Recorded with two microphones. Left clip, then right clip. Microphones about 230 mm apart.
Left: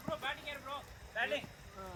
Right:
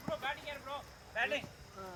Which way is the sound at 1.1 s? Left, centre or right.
Centre.